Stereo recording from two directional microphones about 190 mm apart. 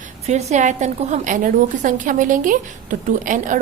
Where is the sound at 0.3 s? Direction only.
35° right (ahead or behind).